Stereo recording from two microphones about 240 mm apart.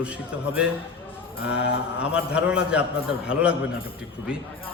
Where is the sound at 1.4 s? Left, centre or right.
Left.